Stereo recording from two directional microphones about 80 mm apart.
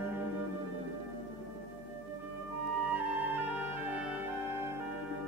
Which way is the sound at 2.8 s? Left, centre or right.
Right.